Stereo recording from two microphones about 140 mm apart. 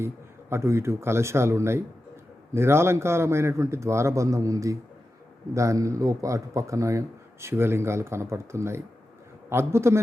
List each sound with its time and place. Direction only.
0.5 s a man's voice: 20° right (ahead or behind)